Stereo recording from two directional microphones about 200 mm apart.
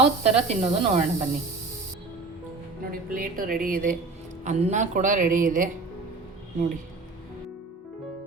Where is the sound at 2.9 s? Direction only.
45° right (ahead or behind).